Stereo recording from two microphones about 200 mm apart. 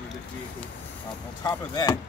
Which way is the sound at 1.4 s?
20° left (ahead or behind).